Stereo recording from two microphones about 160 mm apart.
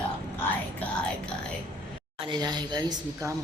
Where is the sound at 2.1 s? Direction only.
30° right (ahead or behind).